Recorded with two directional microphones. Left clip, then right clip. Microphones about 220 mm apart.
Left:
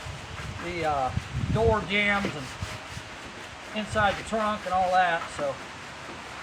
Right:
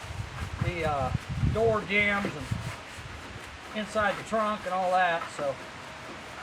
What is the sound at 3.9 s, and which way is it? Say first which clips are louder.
Speech: left 2 dB; centre (ahead or behind).